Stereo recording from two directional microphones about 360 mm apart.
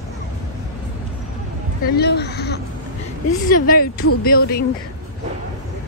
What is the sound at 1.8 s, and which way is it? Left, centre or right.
Speech, left.